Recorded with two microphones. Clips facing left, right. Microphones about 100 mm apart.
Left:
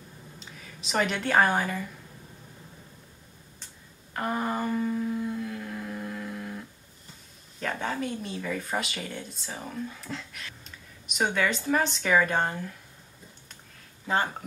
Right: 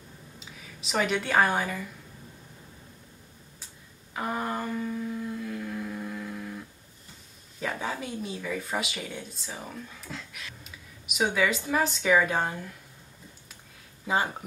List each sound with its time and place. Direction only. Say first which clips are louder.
0.4 s speech: even; centre (ahead or behind)
4.1 s humming: left 2 dB; centre (ahead or behind)
7.6 s speech: left 2 dB; 5° right (ahead or behind)
14.0 s speech: even; 10° right (ahead or behind)